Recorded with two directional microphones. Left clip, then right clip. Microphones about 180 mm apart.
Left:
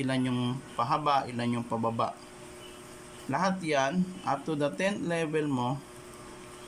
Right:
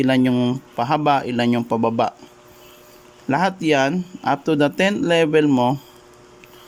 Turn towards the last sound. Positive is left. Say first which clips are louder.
# right 14 dB
turn(degrees=-50)  # may be behind; listen again after turning